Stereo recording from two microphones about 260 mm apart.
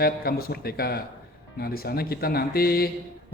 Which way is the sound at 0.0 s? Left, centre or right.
Left.